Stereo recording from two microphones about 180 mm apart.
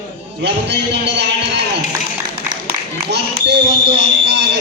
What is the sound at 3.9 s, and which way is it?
Speech, 75° right (ahead or behind).